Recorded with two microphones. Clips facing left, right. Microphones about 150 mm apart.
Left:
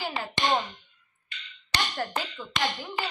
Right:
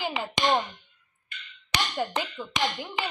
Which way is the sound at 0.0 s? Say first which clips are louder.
Right 2 dB; 20° right (ahead or behind).